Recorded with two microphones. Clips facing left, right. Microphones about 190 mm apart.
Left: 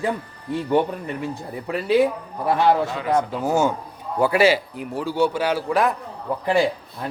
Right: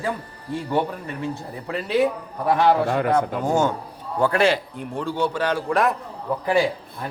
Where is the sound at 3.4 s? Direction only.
5° left (ahead or behind).